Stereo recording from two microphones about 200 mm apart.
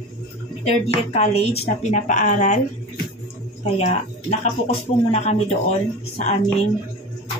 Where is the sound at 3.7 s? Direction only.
35° left (ahead or behind).